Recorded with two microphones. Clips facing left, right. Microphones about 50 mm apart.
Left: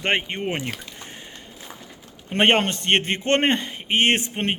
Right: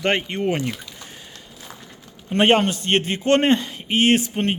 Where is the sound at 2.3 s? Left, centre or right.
Left.